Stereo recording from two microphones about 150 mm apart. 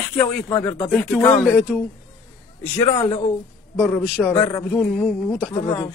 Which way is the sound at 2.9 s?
35° left (ahead or behind).